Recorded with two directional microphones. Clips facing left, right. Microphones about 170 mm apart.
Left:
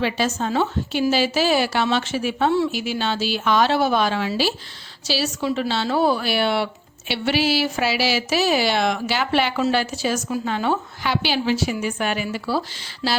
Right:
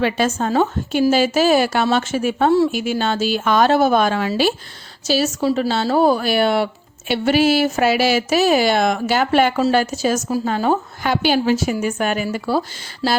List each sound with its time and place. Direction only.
0.0 s a woman's voice: 50° right (ahead or behind)